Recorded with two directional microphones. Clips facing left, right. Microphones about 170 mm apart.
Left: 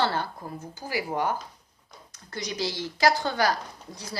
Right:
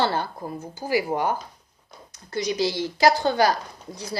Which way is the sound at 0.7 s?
15° right (ahead or behind).